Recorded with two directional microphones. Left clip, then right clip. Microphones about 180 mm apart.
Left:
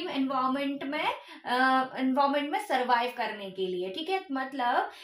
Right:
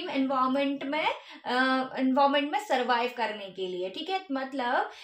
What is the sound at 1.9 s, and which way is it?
A woman's voice, 20° right (ahead or behind).